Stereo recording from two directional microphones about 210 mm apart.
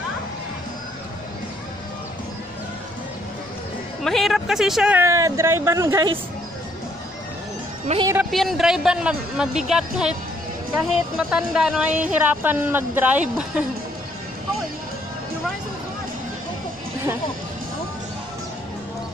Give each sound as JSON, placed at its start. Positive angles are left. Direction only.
{"t": 4.0, "sound": "a woman's voice", "side_deg": 0}
{"t": 7.9, "sound": "speech", "side_deg": -35}
{"t": 8.3, "sound": "a woman's voice", "side_deg": 0}